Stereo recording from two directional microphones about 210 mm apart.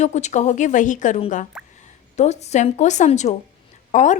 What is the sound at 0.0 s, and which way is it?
A woman's voice, 35° left (ahead or behind).